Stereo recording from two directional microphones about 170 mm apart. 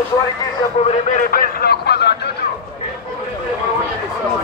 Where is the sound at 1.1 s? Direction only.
55° left (ahead or behind); by 2.1 s 75° left (ahead or behind).